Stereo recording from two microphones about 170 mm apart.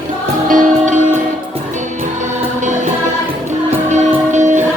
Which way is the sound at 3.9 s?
45° right (ahead or behind).